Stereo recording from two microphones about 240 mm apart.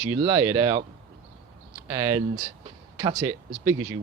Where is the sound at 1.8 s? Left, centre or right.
Centre.